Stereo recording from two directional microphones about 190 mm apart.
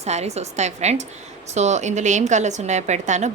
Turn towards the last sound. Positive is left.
turn(degrees=-40)  # may be behind; listen again after turning